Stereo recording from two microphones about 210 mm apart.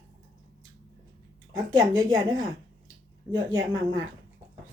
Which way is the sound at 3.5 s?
70° right (ahead or behind).